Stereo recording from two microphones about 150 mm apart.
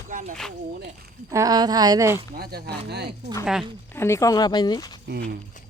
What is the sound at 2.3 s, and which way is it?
Speech, 90° right.